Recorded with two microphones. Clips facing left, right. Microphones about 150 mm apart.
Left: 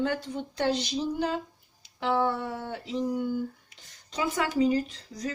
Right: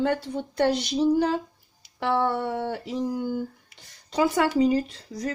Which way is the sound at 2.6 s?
65° right (ahead or behind).